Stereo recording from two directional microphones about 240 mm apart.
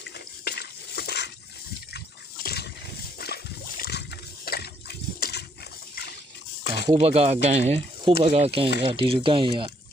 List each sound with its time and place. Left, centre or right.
0.4 s stir: left
2.4 s a sound: left
4.4 s water: left
6.8 s speech: right